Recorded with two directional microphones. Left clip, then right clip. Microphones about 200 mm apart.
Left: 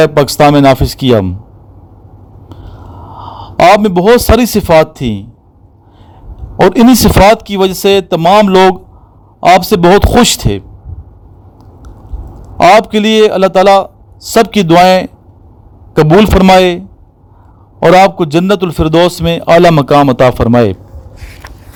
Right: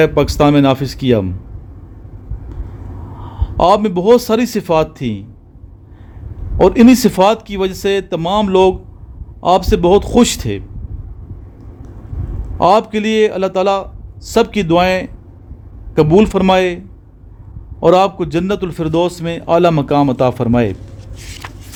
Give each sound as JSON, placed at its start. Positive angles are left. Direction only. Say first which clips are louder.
{"t": 0.0, "sound": "a man's voice", "louder": "left 5 dB", "side_deg": 35}
{"t": 3.2, "sound": "a man's voice", "louder": "left 6 dB", "side_deg": 40}
{"t": 6.6, "sound": "a man's voice", "louder": "left 3 dB", "side_deg": 35}
{"t": 12.6, "sound": "a man's voice", "louder": "left 6 dB", "side_deg": 40}